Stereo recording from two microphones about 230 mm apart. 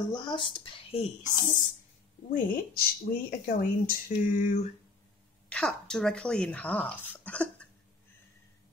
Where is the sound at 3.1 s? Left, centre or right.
Left.